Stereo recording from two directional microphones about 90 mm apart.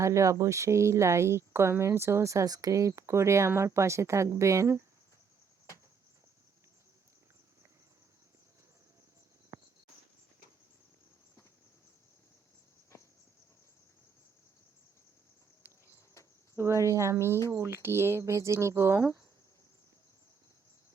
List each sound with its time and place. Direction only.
0.0 s speech: 35° right (ahead or behind)
9.5 s cricket: 35° right (ahead or behind)
15.6 s cricket: 15° right (ahead or behind)
16.6 s speech: 30° right (ahead or behind)